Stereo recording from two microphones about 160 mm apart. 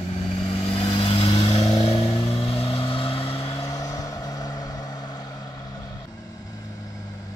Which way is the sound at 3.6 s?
20° left (ahead or behind).